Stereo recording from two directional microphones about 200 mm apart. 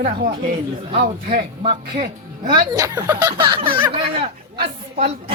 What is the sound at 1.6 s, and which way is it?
Speech, 25° right (ahead or behind).